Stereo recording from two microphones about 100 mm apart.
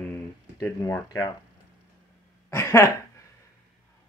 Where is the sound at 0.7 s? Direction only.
15° left (ahead or behind).